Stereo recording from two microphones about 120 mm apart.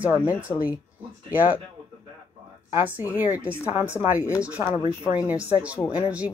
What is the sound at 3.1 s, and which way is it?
Speech, 15° right (ahead or behind).